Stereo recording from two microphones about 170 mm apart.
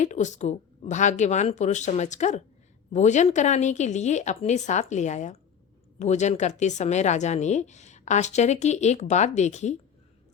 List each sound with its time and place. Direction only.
0.0 s speech: 45° left (ahead or behind)